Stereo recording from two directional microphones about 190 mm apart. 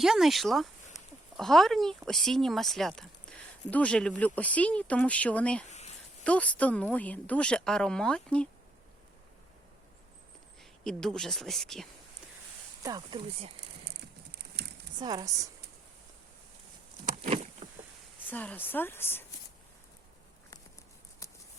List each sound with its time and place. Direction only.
0.0 s speech: centre (ahead or behind)
0.9 s a sound: 15° left (ahead or behind)
1.4 s a woman's voice: centre (ahead or behind)
5.6 s a sound: 35° left (ahead or behind)
6.2 s a woman's voice: 5° left (ahead or behind)
10.6 s speech: 5° left (ahead or behind)
12.8 s speech: 20° right (ahead or behind)
14.9 s speech: 20° right (ahead or behind)
17.2 s boat: 35° right (ahead or behind)
18.3 s a woman's voice: 10° left (ahead or behind)
21.2 s shuffling cards: 15° left (ahead or behind)